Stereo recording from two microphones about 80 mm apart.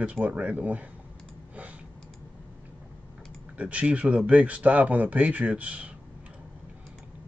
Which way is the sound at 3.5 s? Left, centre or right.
Centre.